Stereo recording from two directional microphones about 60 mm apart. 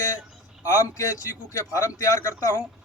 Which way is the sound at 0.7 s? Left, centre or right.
Left.